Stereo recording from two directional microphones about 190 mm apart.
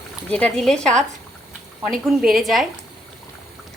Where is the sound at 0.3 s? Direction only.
5° left (ahead or behind).